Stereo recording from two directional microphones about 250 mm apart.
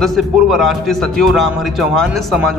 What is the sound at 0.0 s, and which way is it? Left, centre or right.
Speech, centre.